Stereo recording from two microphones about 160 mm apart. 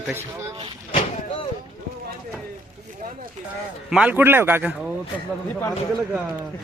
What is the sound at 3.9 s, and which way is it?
Speech, 10° right (ahead or behind).